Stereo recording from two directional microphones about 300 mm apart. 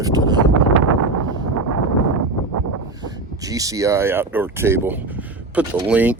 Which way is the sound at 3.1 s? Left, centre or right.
Centre.